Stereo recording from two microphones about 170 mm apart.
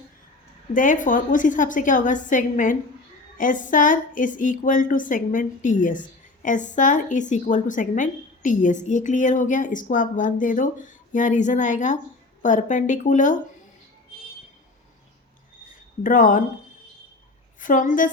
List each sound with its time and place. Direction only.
0.7 s a woman's voice: 50° left (ahead or behind)
16.0 s a woman's voice: 50° left (ahead or behind)
17.6 s a woman's voice: 50° left (ahead or behind)